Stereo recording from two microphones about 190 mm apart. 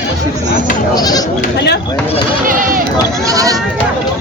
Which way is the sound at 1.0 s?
20° left (ahead or behind).